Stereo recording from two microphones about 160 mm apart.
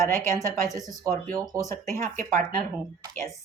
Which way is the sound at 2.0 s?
45° right (ahead or behind).